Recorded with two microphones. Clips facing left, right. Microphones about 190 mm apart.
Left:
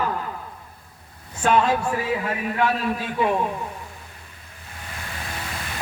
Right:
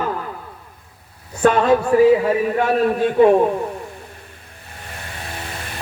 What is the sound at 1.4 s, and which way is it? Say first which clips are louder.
A man's voice: right 5 dB; 55° right (ahead or behind).